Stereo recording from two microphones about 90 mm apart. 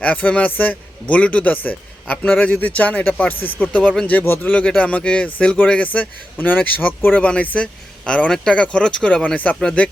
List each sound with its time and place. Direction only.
0.0 s speech: 15° left (ahead or behind)